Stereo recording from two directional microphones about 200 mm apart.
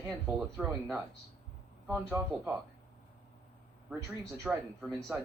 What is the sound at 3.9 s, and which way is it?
Speech, 15° right (ahead or behind).